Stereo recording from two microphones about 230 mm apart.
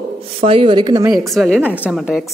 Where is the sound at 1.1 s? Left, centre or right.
Centre.